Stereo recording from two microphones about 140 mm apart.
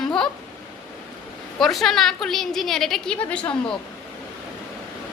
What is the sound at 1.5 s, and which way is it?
A woman's voice, centre (ahead or behind).